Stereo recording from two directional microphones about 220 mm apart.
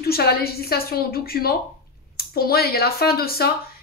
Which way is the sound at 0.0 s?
45° left (ahead or behind).